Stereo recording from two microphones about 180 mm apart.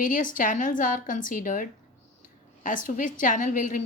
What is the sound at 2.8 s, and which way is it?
Speech, 45° left (ahead or behind).